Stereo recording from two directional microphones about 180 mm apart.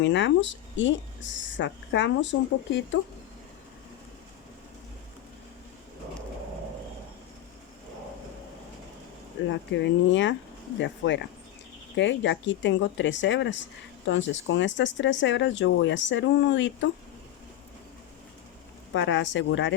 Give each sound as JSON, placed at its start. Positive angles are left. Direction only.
{"t": 0.0, "sound": "speech", "side_deg": 90}
{"t": 9.5, "sound": "speech", "side_deg": 85}
{"t": 18.9, "sound": "speech", "side_deg": 90}